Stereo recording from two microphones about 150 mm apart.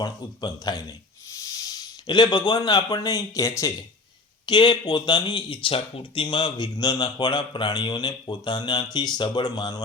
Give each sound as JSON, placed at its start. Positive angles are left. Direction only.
{"t": 0.0, "sound": "speech", "side_deg": 25}
{"t": 4.4, "sound": "speech", "side_deg": 30}